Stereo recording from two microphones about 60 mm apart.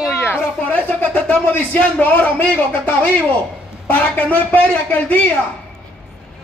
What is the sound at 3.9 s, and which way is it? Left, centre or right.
Speech, left.